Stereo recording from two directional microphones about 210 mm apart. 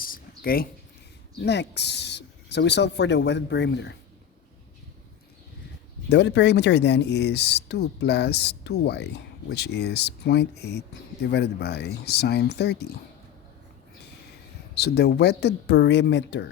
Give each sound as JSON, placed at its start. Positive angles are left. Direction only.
{"t": 0.0, "sound": "a sound", "side_deg": 45}
{"t": 1.4, "sound": "speech", "side_deg": 55}
{"t": 6.1, "sound": "speech", "side_deg": 55}
{"t": 14.8, "sound": "speech", "side_deg": 50}